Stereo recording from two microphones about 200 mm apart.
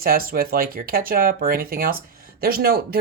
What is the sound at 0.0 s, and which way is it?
Speech, 50° right (ahead or behind).